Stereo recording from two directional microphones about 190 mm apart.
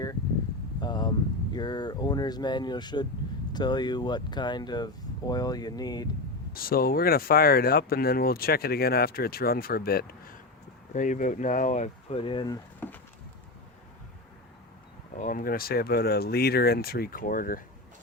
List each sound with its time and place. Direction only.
0.8 s vehicle: 20° left (ahead or behind)
1.5 s speech: 20° left (ahead or behind)
6.5 s speech: 50° left (ahead or behind); by 12.5 s 25° left (ahead or behind)
15.1 s speech: 45° left (ahead or behind)